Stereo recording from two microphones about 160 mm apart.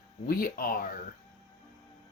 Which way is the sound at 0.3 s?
65° left (ahead or behind).